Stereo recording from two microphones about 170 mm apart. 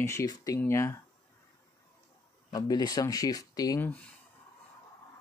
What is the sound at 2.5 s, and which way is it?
Speech, 25° left (ahead or behind).